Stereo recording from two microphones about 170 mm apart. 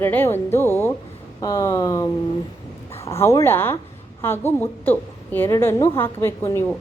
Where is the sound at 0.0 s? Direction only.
10° left (ahead or behind).